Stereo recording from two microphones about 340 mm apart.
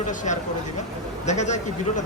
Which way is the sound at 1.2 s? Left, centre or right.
Left.